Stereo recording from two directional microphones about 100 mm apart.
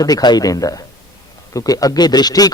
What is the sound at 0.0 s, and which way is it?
A man's voice, 40° left (ahead or behind).